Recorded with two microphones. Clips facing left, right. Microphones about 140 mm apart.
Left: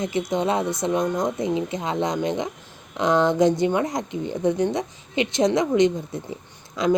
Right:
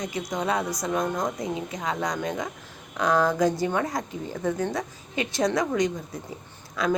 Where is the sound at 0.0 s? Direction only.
25° left (ahead or behind).